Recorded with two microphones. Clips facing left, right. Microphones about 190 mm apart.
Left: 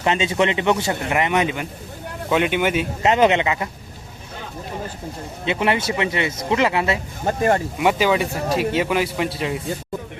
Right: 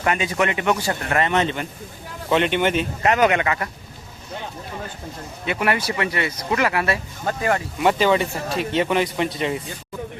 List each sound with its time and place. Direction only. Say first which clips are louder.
0.0 s speech: left 2 dB; 25° left (ahead or behind); by 2.8 s 10° left (ahead or behind)
3.0 s speech: left 2 dB; 25° left (ahead or behind)
5.5 s speech: left 2 dB; 20° left (ahead or behind)
7.8 s a man's voice: even; 10° left (ahead or behind)